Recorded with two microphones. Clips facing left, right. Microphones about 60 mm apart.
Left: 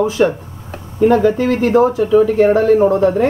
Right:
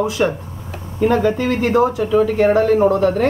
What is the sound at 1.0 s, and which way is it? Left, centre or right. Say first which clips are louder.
Speech: left 4 dB; centre.